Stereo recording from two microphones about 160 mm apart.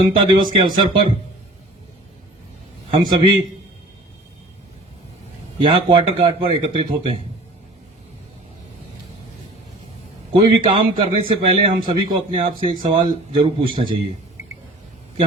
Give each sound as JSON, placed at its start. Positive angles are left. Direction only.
{"t": 0.2, "sound": "speech", "side_deg": -30}
{"t": 2.9, "sound": "a man's voice", "side_deg": -35}
{"t": 5.5, "sound": "a man's voice", "side_deg": -30}
{"t": 10.3, "sound": "a man's voice", "side_deg": -35}